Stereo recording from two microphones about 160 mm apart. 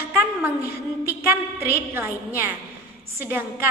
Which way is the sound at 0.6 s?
70° left (ahead or behind).